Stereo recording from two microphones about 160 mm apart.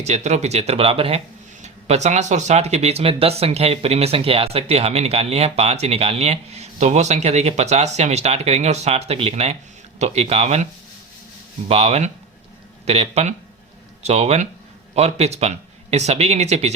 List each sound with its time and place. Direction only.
0.0 s speech: 45° right (ahead or behind)
11.7 s speech: 40° right (ahead or behind)